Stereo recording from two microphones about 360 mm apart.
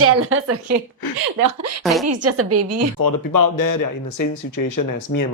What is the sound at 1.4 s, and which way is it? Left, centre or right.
Speech, right.